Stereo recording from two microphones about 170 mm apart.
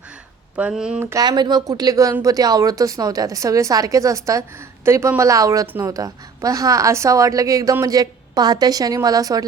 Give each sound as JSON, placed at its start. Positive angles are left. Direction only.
{"t": 0.5, "sound": "speech", "side_deg": -5}
{"t": 1.1, "sound": "a woman's voice", "side_deg": -25}